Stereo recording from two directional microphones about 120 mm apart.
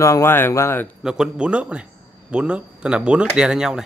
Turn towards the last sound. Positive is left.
turn(degrees=-5)  # may be behind; listen again after turning